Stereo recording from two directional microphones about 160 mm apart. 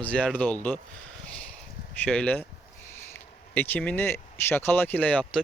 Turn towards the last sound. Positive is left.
turn(degrees=10)  # may be behind; listen again after turning